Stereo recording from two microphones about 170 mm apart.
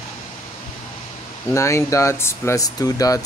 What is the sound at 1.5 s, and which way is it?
Speech, 15° left (ahead or behind).